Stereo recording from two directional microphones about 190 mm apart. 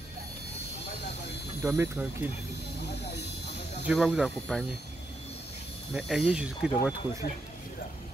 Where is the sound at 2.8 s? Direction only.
60° left (ahead or behind).